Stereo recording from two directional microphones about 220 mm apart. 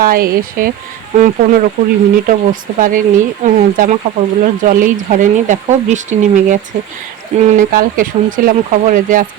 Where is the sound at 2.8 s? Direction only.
35° right (ahead or behind).